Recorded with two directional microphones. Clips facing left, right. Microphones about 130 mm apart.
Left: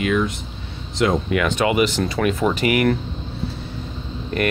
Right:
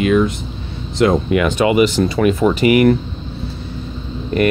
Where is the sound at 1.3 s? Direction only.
10° right (ahead or behind).